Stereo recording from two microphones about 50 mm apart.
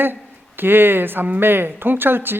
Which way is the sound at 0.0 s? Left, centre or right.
Right.